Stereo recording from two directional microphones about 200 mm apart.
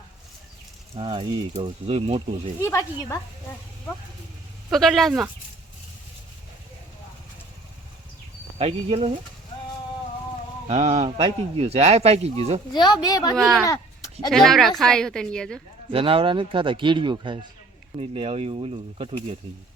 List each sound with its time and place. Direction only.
0.9 s speech: 25° right (ahead or behind)
2.6 s speech: 15° left (ahead or behind)
4.7 s a woman's voice: centre (ahead or behind)
8.5 s a man's voice: 30° right (ahead or behind)
10.7 s a man's voice: 35° right (ahead or behind)
12.7 s speech: 20° left (ahead or behind)
13.3 s a woman's voice: centre (ahead or behind)
15.9 s speech: 25° right (ahead or behind)